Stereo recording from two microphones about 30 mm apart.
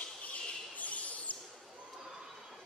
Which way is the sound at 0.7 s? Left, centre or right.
Left.